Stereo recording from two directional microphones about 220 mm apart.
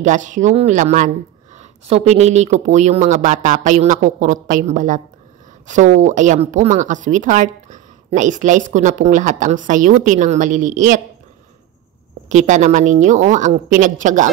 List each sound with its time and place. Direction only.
0.0 s a woman's voice: 35° right (ahead or behind)
12.3 s a woman's voice: 35° right (ahead or behind)